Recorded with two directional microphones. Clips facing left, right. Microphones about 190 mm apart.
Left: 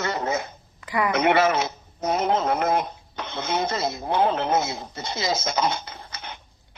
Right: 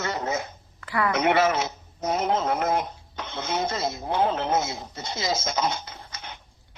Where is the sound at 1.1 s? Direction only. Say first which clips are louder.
Left 2 dB; 65° left (ahead or behind).